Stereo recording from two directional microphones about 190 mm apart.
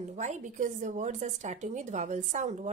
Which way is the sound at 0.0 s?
40° right (ahead or behind).